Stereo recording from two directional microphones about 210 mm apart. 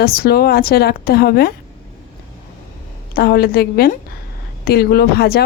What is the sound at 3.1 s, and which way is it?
Speech, 45° left (ahead or behind).